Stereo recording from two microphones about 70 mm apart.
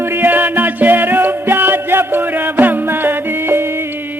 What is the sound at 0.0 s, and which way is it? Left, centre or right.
Music, right.